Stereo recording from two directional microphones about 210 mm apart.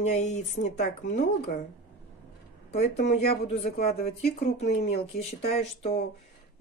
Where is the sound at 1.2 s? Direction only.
45° left (ahead or behind).